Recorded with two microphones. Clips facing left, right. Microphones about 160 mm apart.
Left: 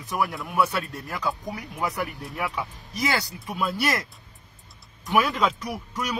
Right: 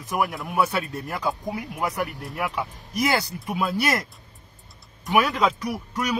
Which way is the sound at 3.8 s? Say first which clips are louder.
Right 2 dB; 20° right (ahead or behind).